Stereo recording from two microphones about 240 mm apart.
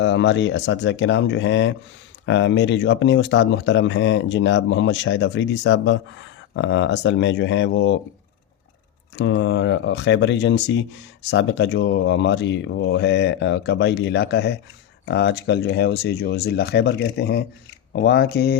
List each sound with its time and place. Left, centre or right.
0.0 s speech: left
9.1 s speech: left